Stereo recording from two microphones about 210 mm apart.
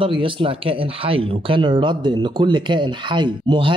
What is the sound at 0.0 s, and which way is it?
Speech, 25° right (ahead or behind).